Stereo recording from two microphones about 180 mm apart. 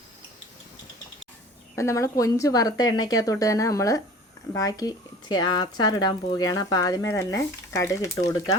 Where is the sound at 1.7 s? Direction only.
15° left (ahead or behind).